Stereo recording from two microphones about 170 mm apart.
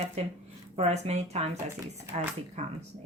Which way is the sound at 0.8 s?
40° right (ahead or behind).